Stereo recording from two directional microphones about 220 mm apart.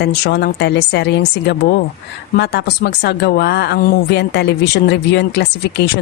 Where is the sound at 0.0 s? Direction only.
50° left (ahead or behind).